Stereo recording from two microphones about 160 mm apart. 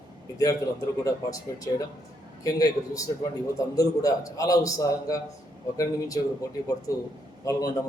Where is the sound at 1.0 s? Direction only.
20° left (ahead or behind).